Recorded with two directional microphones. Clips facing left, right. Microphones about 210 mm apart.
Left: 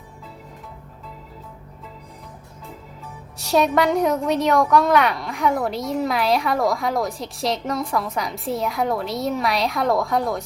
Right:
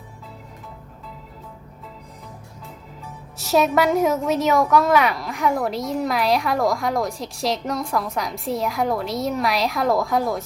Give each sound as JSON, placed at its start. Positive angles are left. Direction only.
{"t": 3.3, "sound": "a woman's voice", "side_deg": 0}